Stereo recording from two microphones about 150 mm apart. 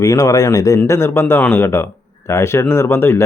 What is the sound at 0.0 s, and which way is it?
A man's voice, 25° left (ahead or behind).